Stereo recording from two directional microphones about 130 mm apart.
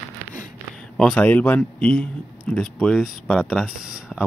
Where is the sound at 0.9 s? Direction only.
5° left (ahead or behind).